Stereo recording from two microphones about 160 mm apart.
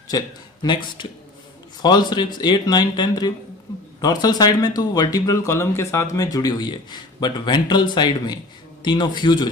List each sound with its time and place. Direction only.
0.1 s speech: 25° left (ahead or behind)